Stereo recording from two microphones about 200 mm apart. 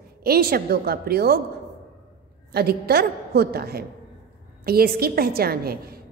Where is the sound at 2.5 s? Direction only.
50° right (ahead or behind).